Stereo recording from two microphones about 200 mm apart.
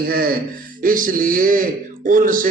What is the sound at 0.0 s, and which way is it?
A man's voice, 45° right (ahead or behind).